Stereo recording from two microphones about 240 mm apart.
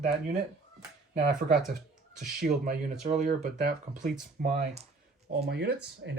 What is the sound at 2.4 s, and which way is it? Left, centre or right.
Speech, right.